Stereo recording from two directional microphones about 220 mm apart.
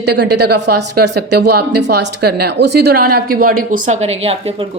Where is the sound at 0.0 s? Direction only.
50° right (ahead or behind).